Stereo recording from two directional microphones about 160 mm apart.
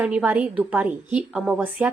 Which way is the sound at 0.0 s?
5° right (ahead or behind).